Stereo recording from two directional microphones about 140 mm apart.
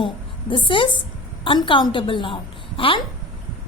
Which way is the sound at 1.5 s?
35° left (ahead or behind).